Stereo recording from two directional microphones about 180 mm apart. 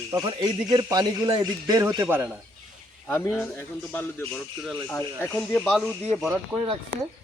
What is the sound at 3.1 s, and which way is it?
Speech, 15° left (ahead or behind).